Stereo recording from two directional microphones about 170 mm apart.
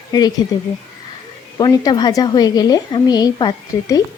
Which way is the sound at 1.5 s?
20° left (ahead or behind).